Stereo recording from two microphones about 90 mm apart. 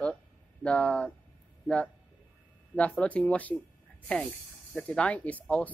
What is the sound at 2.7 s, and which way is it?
Speech, 15° left (ahead or behind).